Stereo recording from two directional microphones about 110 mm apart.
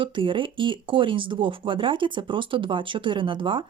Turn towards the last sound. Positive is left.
turn(degrees=-50)  # may be behind; listen again after turning